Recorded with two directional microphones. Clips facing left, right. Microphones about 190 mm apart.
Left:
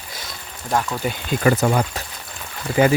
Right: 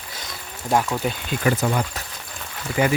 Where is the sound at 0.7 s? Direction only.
10° right (ahead or behind).